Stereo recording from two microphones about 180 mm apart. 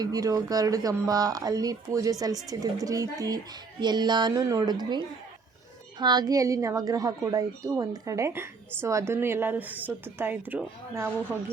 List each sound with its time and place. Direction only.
0.0 s a woman's voice: 20° right (ahead or behind)